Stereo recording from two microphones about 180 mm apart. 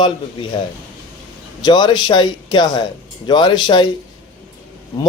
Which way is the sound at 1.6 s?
25° left (ahead or behind).